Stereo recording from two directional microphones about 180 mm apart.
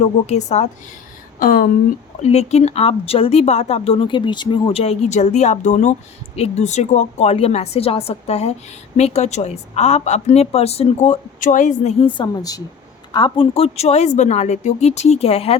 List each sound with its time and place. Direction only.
0.0 s a woman's voice: 40° left (ahead or behind)
1.4 s speech: 50° left (ahead or behind)
2.2 s a woman's voice: 35° left (ahead or behind)